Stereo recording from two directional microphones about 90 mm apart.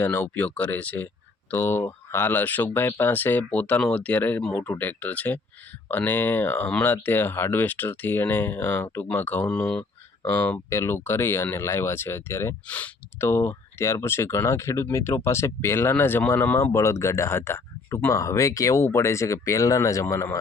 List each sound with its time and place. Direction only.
0.0 s speech: 20° left (ahead or behind)
12.6 s speech: 15° left (ahead or behind)
13.1 s speech: 25° left (ahead or behind)
16.7 s speech: 30° left (ahead or behind)